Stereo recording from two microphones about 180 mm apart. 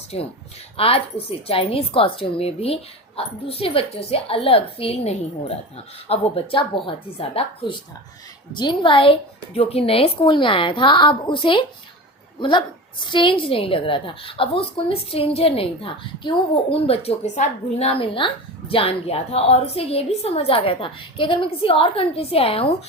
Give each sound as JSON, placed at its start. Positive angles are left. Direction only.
{"t": 0.8, "sound": "a woman's voice", "side_deg": 30}